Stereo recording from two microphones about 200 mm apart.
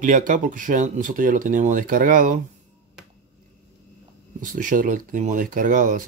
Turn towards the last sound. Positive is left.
turn(degrees=-40)  # may be behind; listen again after turning